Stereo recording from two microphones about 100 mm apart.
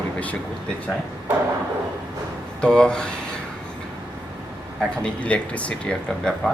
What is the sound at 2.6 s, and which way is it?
Speech, 10° left (ahead or behind).